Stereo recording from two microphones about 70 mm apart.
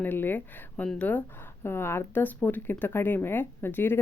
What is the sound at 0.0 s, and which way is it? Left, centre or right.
Speech, left.